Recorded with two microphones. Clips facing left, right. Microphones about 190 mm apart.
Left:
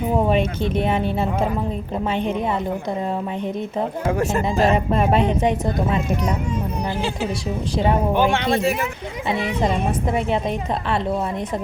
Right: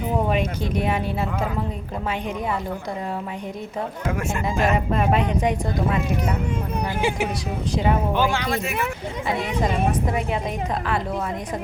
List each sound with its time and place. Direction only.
0.3 s speech: 25° left (ahead or behind)
4.0 s speech: 35° left (ahead or behind)
8.1 s speech: 20° left (ahead or behind)